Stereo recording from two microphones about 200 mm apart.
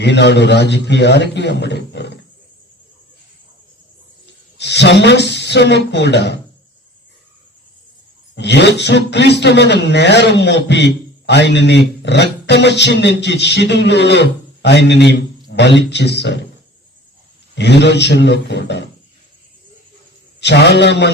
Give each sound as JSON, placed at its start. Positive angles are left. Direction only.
{"t": 0.0, "sound": "speech", "side_deg": 60}
{"t": 4.3, "sound": "speech", "side_deg": 60}
{"t": 8.4, "sound": "speech", "side_deg": 60}
{"t": 17.5, "sound": "speech", "side_deg": 60}
{"t": 20.4, "sound": "speech", "side_deg": 60}